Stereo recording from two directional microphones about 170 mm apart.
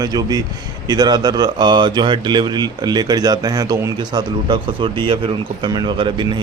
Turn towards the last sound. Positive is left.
turn(degrees=-30)  # may be behind; listen again after turning